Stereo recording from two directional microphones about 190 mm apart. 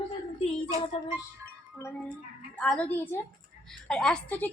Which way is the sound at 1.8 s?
15° left (ahead or behind).